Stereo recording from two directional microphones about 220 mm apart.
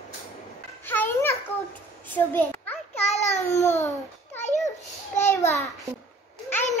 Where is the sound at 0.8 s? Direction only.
10° left (ahead or behind).